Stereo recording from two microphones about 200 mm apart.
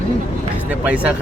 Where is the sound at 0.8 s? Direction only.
5° right (ahead or behind).